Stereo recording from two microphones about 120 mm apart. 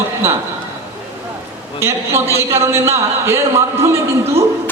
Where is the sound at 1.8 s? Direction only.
20° right (ahead or behind).